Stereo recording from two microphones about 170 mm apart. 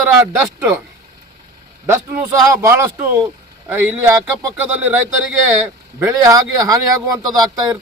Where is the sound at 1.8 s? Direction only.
15° right (ahead or behind).